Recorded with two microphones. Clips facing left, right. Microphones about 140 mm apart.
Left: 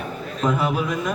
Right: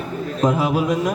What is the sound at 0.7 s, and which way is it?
Mantra, 35° right (ahead or behind).